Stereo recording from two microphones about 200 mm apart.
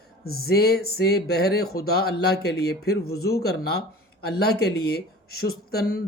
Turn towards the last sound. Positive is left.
turn(degrees=50)  # may be behind; listen again after turning